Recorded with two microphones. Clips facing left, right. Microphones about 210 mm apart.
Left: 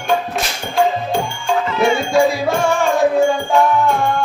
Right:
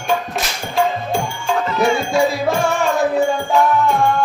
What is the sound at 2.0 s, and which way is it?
Music, centre (ahead or behind).